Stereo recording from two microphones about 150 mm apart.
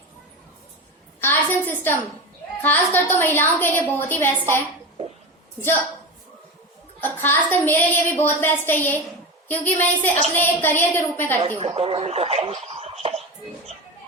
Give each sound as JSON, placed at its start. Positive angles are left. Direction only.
{"t": 1.2, "sound": "a sound", "side_deg": 15}
{"t": 2.6, "sound": "a woman's voice", "side_deg": 15}
{"t": 7.0, "sound": "a woman's voice", "side_deg": 10}
{"t": 11.3, "sound": "a woman's voice", "side_deg": -35}